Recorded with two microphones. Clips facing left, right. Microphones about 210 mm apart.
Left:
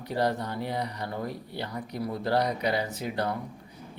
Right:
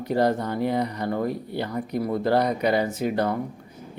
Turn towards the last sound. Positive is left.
turn(degrees=-50)  # may be behind; listen again after turning